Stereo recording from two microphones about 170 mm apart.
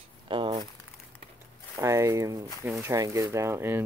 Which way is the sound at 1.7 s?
15° right (ahead or behind).